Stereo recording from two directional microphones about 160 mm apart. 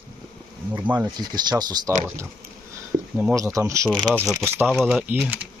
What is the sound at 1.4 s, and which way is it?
Speech, 25° right (ahead or behind).